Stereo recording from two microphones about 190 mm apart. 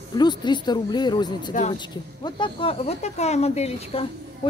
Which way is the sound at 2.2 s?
25° left (ahead or behind).